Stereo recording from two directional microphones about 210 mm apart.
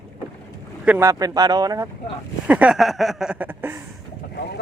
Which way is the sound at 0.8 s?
10° right (ahead or behind).